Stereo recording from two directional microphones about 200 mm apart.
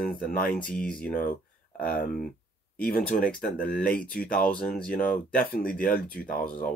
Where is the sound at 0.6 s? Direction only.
5° left (ahead or behind).